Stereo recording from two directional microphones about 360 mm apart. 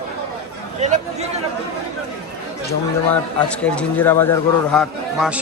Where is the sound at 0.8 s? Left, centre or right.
Centre.